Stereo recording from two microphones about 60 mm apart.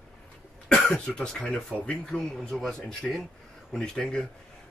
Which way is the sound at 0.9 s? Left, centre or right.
Centre.